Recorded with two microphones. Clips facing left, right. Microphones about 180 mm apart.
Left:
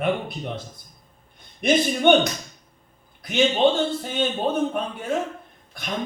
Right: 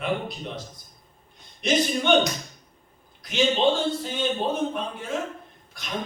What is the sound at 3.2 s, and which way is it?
A man's voice, 55° left (ahead or behind).